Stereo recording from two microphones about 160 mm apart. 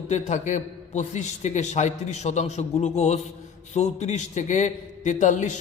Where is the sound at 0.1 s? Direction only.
50° left (ahead or behind).